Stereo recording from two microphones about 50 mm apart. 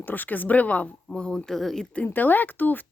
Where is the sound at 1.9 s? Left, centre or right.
Left.